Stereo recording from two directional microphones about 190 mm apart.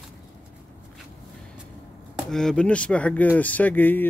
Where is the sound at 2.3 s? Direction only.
5° left (ahead or behind).